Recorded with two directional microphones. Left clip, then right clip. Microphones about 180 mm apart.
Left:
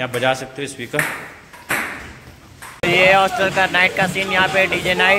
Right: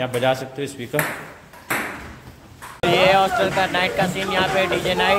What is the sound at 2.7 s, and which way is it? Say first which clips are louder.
Speech: left 2 dB; 15° left (ahead or behind).